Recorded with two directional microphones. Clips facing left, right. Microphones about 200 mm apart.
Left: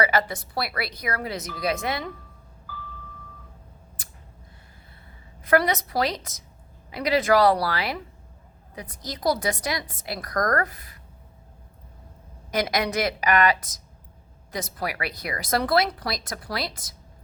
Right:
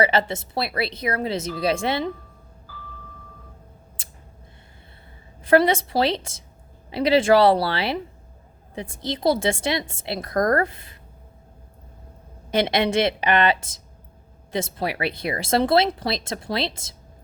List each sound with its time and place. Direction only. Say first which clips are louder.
0.0 s speech: right 3 dB; 25° right (ahead or behind)
4.0 s scissors: right 1 dB; 25° right (ahead or behind)
5.4 s speech: right 4 dB; 30° right (ahead or behind)
12.5 s speech: right 4 dB; 25° right (ahead or behind)